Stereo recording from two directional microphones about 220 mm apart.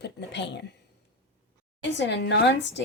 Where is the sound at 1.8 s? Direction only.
50° left (ahead or behind).